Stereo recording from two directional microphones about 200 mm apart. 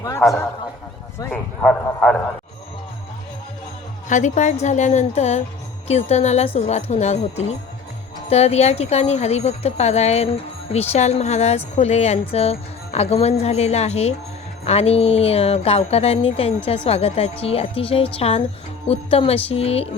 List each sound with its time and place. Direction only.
0.2 s a man's voice: centre (ahead or behind)
4.1 s a woman's voice: 35° left (ahead or behind)